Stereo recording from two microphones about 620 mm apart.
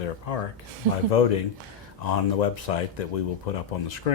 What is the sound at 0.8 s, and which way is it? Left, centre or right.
Speech, right.